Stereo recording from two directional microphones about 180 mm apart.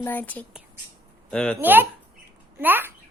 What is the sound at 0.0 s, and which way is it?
Speech, 10° left (ahead or behind).